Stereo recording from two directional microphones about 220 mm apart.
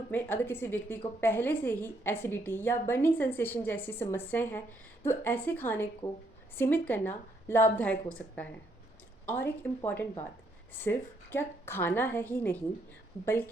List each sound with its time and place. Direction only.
0.1 s a woman's voice: 10° left (ahead or behind)
9.2 s a woman's voice: 10° left (ahead or behind)